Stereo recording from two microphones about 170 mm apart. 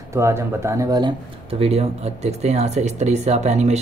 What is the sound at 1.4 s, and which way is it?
Speech, 35° right (ahead or behind).